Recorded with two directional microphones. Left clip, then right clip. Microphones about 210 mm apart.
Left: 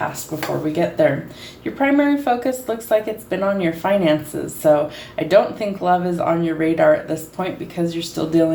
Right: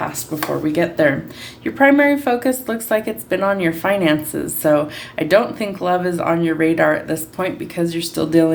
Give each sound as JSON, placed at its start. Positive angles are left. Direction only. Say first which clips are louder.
{"t": 0.3, "sound": "speech", "louder": "right 3 dB", "side_deg": -40}